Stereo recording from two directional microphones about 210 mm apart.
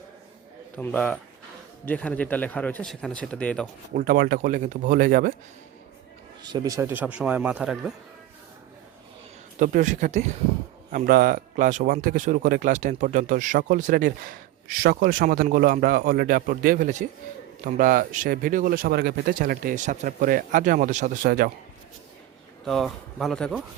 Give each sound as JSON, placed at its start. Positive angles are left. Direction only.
{"t": 0.8, "sound": "speech", "side_deg": 5}
{"t": 3.9, "sound": "speech", "side_deg": -45}
{"t": 6.4, "sound": "speech", "side_deg": -20}
{"t": 9.6, "sound": "speech", "side_deg": -35}
{"t": 10.9, "sound": "a man's voice", "side_deg": -45}
{"t": 22.6, "sound": "speech", "side_deg": 0}